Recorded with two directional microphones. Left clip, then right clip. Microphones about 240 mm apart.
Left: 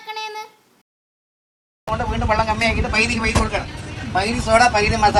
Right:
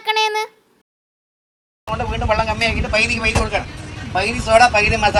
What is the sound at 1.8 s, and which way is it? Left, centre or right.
Speech, centre.